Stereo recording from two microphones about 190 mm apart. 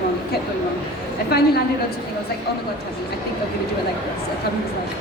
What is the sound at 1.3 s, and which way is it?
Speech, 55° left (ahead or behind).